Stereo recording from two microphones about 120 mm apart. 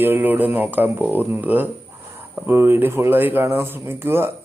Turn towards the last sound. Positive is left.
turn(degrees=-20)  # may be behind; listen again after turning